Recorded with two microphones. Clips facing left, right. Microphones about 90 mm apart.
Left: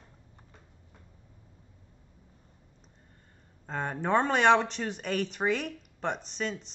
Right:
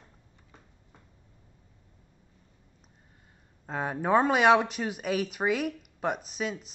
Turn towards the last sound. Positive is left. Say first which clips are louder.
# right 1 dB
turn(degrees=-5)  # may be behind; listen again after turning